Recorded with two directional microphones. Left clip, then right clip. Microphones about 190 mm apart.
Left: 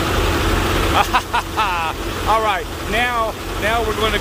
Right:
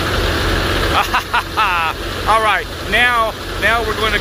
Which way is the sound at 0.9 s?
10° left (ahead or behind).